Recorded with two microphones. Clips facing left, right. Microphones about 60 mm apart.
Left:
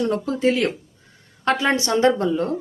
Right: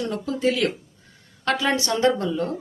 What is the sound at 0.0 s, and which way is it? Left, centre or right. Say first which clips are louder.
A woman's voice: left 3 dB; left.